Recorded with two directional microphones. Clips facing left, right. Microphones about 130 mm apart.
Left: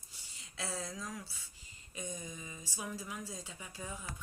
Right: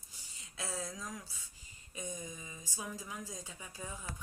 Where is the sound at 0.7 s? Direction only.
15° right (ahead or behind).